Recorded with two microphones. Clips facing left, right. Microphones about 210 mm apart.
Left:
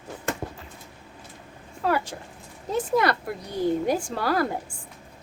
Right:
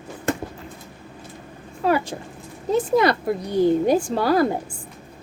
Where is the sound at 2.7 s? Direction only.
20° right (ahead or behind).